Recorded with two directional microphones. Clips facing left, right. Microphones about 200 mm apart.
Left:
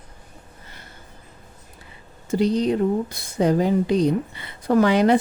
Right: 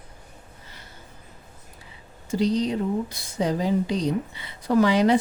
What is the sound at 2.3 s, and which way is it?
Speech, 55° left (ahead or behind).